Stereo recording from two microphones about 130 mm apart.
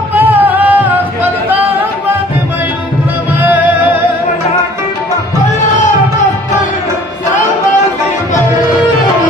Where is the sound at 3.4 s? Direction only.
10° right (ahead or behind).